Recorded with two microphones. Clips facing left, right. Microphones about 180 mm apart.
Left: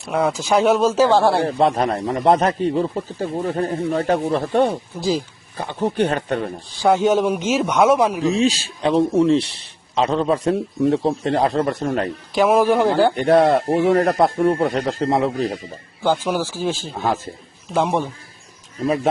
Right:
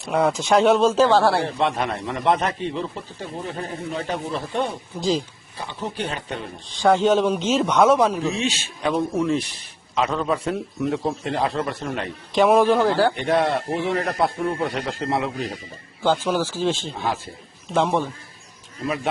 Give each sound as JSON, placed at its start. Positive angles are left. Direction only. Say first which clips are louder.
{"t": 0.1, "sound": "speech", "louder": "even", "side_deg": 0}
{"t": 1.0, "sound": "a man's voice", "louder": "left 2 dB", "side_deg": 20}
{"t": 1.5, "sound": "speech", "louder": "left 5 dB", "side_deg": 40}
{"t": 4.9, "sound": "a man's voice", "louder": "even", "side_deg": 5}
{"t": 5.5, "sound": "speech", "louder": "left 9 dB", "side_deg": 50}
{"t": 6.7, "sound": "a man's voice", "louder": "left 1 dB", "side_deg": 10}
{"t": 8.2, "sound": "speech", "louder": "left 6 dB", "side_deg": 35}
{"t": 12.3, "sound": "speech", "louder": "even", "side_deg": 0}
{"t": 12.7, "sound": "speech", "louder": "left 3 dB", "side_deg": 20}
{"t": 13.1, "sound": "speech", "louder": "left 6 dB", "side_deg": 45}
{"t": 16.2, "sound": "a man's voice", "louder": "even", "side_deg": 10}